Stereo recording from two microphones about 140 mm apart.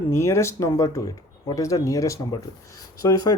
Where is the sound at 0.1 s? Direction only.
20° left (ahead or behind).